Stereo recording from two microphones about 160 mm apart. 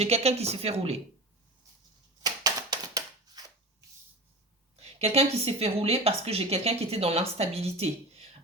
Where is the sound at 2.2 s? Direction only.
25° right (ahead or behind).